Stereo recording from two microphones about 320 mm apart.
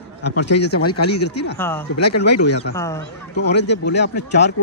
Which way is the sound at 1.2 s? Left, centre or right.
Left.